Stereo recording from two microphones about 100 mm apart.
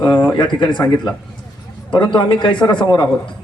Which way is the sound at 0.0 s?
45° left (ahead or behind).